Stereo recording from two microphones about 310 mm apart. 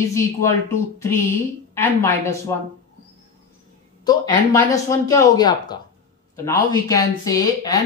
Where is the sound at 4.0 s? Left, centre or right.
Centre.